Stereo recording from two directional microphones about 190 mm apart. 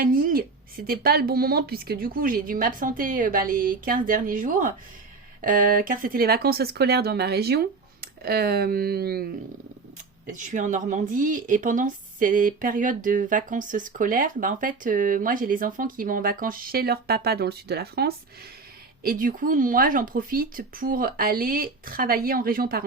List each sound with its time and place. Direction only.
0.0 s a sound: 50° right (ahead or behind)
0.9 s speech: 50° right (ahead or behind)
10.2 s speech: 40° right (ahead or behind)